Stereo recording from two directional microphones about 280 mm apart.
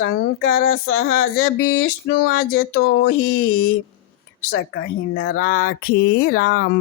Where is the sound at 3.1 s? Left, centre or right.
Left.